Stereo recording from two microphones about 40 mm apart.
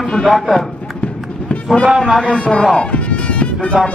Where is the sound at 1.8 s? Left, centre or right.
Centre.